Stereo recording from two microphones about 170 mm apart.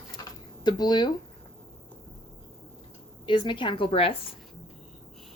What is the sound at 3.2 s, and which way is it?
Speech, 30° left (ahead or behind).